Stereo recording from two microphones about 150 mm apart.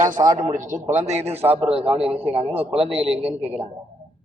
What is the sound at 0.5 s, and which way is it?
A man's voice, 60° right (ahead or behind).